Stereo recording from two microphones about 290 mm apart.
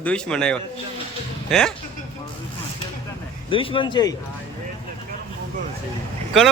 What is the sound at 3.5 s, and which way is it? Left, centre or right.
Speech, centre.